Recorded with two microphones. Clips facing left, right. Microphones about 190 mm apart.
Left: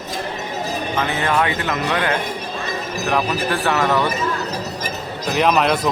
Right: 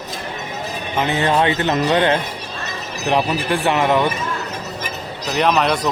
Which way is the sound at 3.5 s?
15° right (ahead or behind).